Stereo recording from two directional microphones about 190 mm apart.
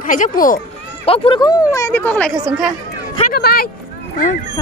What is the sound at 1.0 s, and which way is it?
Speech, 30° left (ahead or behind).